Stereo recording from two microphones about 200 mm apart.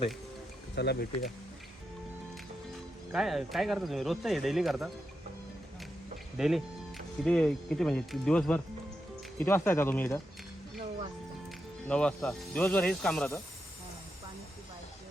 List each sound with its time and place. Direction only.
0.8 s speech: 55° left (ahead or behind)
3.1 s speech: centre (ahead or behind)
6.3 s speech: centre (ahead or behind)
11.9 s speech: 5° left (ahead or behind)